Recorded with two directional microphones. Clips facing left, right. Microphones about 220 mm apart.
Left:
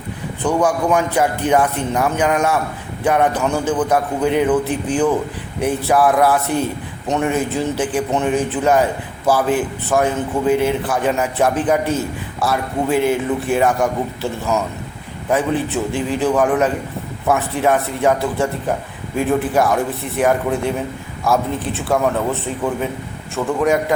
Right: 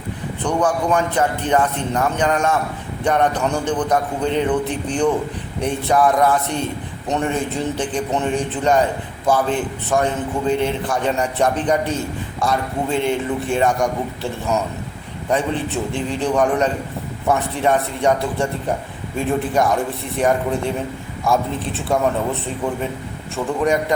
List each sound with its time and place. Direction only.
0.4 s a man's voice: 10° left (ahead or behind)
21.7 s a man's voice: centre (ahead or behind)